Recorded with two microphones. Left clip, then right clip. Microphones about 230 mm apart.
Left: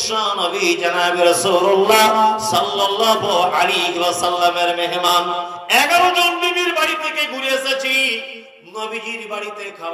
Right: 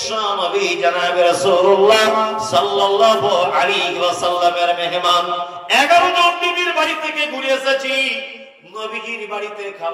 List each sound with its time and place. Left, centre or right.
0.0 s music: left